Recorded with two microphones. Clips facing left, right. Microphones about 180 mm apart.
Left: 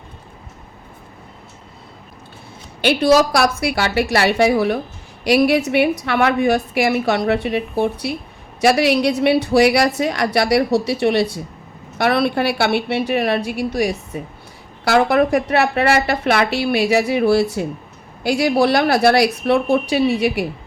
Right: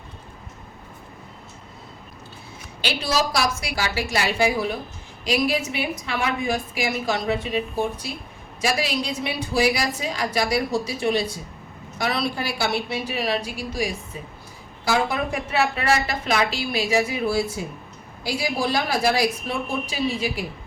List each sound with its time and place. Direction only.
2.8 s a woman's voice: 60° left (ahead or behind)